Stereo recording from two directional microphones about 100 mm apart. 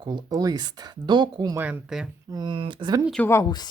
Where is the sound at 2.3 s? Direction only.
45° right (ahead or behind).